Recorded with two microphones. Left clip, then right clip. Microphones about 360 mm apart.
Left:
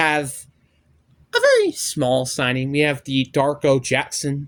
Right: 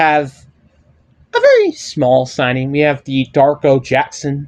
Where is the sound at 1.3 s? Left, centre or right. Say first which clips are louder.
Right 6 dB; left.